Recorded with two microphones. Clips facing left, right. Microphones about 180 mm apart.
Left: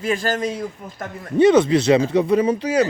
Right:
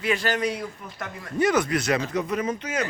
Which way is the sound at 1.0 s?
25° left (ahead or behind).